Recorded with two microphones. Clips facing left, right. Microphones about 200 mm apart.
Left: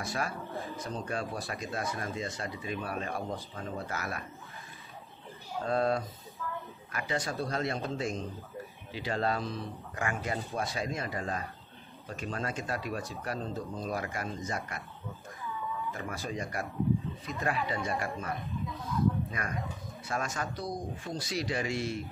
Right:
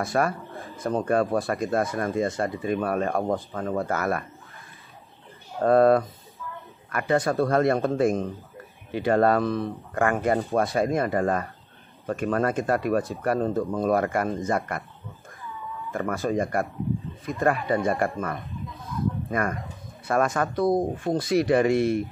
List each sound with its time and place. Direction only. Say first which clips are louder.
0.0 s speech: right 10 dB; 55° right (ahead or behind)
5.6 s speech: right 11 dB; 55° right (ahead or behind)
15.9 s speech: right 11 dB; 55° right (ahead or behind)
19.2 s bird: right 11 dB; 50° right (ahead or behind)
20.1 s speech: right 11 dB; 55° right (ahead or behind)